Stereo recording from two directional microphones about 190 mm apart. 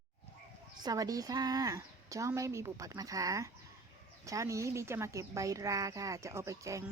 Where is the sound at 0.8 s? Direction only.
20° right (ahead or behind).